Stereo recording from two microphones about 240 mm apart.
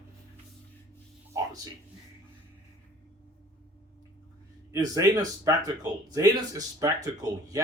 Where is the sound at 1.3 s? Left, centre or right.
Centre.